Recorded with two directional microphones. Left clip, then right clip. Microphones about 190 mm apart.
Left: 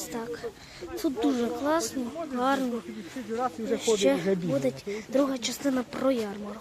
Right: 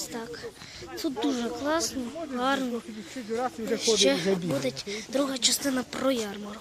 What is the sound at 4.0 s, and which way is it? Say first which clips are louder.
Speech: right 1 dB; 5° left (ahead or behind).